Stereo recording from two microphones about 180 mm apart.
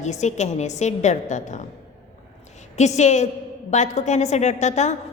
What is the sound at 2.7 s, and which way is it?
A woman's voice, 40° left (ahead or behind).